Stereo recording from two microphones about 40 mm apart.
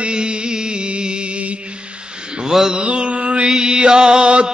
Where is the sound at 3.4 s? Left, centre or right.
Centre.